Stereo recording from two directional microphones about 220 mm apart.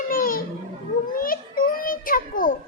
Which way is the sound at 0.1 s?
40° left (ahead or behind).